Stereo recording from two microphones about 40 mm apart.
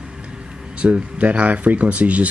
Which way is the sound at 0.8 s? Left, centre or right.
Right.